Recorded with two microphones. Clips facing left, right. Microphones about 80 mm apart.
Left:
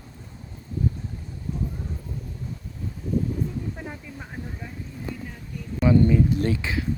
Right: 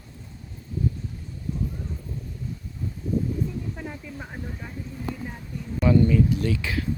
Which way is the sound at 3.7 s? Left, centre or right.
Centre.